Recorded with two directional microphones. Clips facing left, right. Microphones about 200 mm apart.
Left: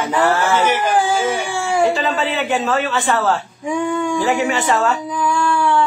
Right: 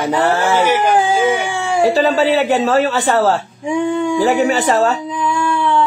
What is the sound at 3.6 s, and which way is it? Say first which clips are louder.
Speech: right 3 dB; 25° right (ahead or behind).